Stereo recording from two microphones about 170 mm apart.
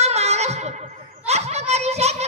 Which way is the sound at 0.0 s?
40° right (ahead or behind).